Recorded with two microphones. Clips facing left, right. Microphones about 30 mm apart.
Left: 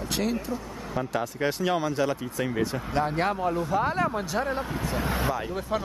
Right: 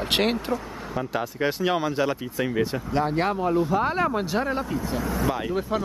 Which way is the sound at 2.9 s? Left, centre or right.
Centre.